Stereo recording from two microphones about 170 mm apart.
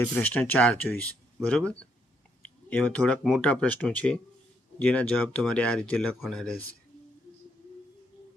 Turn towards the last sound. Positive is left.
turn(degrees=5)  # may be behind; listen again after turning